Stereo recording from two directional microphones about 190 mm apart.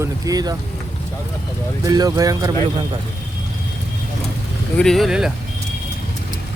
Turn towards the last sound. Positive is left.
turn(degrees=0)  # may be behind; listen again after turning